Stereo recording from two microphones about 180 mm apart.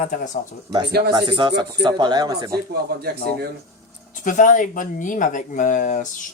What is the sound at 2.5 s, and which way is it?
Speech, 60° right (ahead or behind).